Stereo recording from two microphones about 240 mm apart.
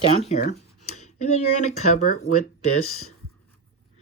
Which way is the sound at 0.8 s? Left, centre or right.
Left.